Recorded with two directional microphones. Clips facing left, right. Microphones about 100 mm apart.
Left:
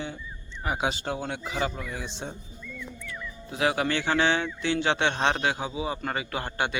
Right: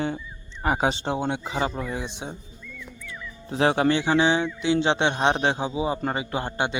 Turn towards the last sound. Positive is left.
turn(degrees=-20)  # may be behind; listen again after turning